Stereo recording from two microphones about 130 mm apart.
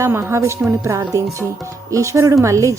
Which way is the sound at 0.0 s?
20° right (ahead or behind).